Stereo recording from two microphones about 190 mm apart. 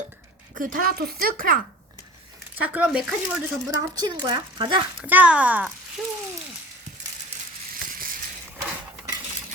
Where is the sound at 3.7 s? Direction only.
20° right (ahead or behind).